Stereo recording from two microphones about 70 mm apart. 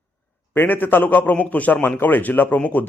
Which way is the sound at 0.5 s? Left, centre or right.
Left.